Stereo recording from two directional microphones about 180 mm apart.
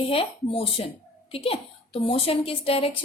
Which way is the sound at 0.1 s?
30° left (ahead or behind).